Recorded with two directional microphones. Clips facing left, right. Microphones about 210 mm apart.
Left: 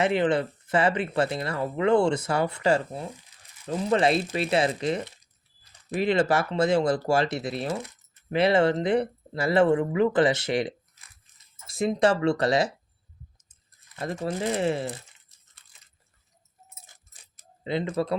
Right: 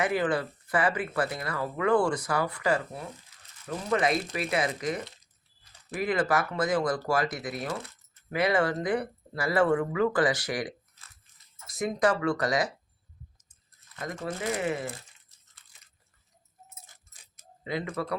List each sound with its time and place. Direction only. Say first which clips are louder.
0.0 s speech: left 4 dB; 25° left (ahead or behind)
13.9 s speech: left 5 dB; 30° left (ahead or behind)
17.3 s a sound: left 4 dB; 30° left (ahead or behind)